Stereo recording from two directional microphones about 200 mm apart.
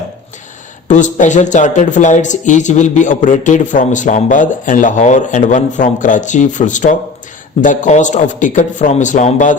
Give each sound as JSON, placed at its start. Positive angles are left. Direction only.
{"t": 0.9, "sound": "speech", "side_deg": 40}